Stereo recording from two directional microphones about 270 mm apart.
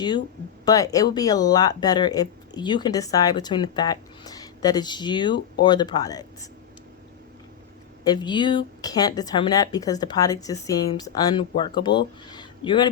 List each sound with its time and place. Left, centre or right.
0.6 s speech: centre
8.0 s speech: centre